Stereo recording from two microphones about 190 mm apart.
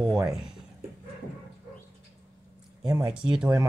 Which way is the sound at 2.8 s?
15° right (ahead or behind).